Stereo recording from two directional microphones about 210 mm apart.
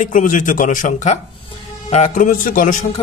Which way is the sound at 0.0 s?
40° left (ahead or behind).